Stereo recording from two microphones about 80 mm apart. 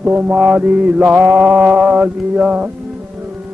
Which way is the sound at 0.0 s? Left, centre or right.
Right.